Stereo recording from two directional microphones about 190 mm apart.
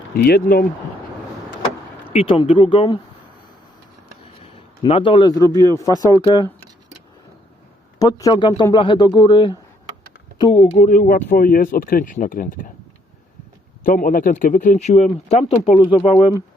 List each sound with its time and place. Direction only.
0.2 s speech: 55° left (ahead or behind)
2.0 s speech: 30° left (ahead or behind)
4.4 s a man's voice: 30° left (ahead or behind)
5.5 s speech: 20° right (ahead or behind)
6.0 s speech: 20° left (ahead or behind)
7.9 s speech: 20° left (ahead or behind)
10.5 s speech: 40° left (ahead or behind)
13.8 s a man's voice: 45° left (ahead or behind)